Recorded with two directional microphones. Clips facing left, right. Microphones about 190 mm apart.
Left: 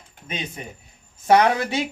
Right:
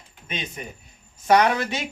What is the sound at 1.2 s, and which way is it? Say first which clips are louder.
Speech: left 2 dB; 25° left (ahead or behind).